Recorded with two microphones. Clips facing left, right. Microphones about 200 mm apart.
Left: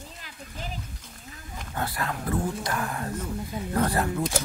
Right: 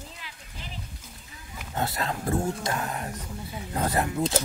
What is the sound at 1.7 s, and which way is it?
Speech, 25° right (ahead or behind).